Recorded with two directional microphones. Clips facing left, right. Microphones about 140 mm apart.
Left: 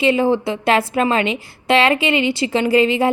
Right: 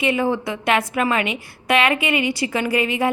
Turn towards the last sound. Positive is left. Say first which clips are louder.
# left 5 dB
turn(degrees=30)  # may be behind; listen again after turning